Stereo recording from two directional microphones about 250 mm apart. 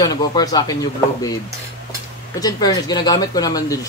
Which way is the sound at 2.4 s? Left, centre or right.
Centre.